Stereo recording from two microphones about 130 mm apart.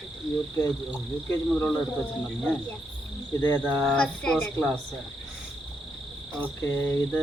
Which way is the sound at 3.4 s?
15° left (ahead or behind).